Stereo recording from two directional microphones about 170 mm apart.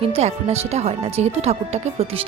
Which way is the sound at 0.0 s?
40° right (ahead or behind).